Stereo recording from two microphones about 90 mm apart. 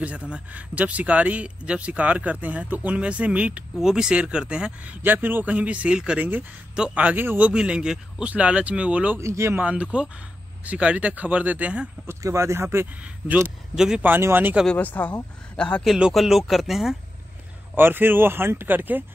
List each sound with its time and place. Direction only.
0.0 s speech: 15° right (ahead or behind)
9.2 s speech: 30° right (ahead or behind)
9.7 s speech: 10° right (ahead or behind)
12.1 s speech: 35° right (ahead or behind)
13.7 s speech: 5° right (ahead or behind)
14.0 s speech: 20° right (ahead or behind)
14.7 s a man's voice: 20° left (ahead or behind)
16.1 s speech: centre (ahead or behind)
17.7 s speech: 25° right (ahead or behind)